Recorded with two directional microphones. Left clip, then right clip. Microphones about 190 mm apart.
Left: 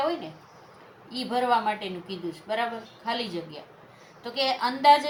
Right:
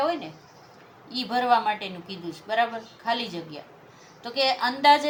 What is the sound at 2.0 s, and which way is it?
Speech, 40° right (ahead or behind).